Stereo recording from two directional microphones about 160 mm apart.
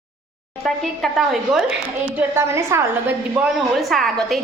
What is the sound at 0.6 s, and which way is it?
A woman's voice, centre (ahead or behind).